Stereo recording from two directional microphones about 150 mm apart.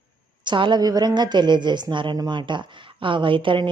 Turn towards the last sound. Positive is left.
turn(degrees=-35)  # may be behind; listen again after turning